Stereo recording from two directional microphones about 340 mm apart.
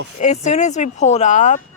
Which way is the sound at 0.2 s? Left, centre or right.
Centre.